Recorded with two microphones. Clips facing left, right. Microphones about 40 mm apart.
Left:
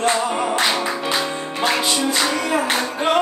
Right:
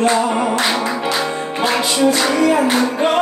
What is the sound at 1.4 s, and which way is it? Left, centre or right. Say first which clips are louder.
Music: right 3 dB; centre.